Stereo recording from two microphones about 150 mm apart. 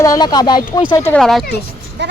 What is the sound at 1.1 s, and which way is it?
Speech, 5° left (ahead or behind).